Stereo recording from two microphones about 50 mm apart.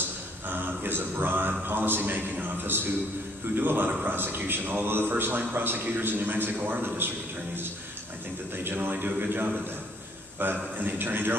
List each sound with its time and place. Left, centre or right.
0.5 s a man's voice: right
8.6 s a man's voice: right
10.4 s a man's voice: right